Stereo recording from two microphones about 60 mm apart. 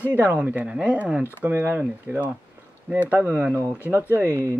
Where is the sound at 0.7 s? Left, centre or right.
Centre.